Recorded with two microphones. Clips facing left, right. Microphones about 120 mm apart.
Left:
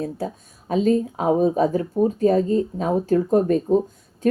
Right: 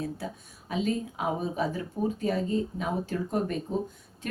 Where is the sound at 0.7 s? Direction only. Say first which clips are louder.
Left 10 dB; 40° left (ahead or behind).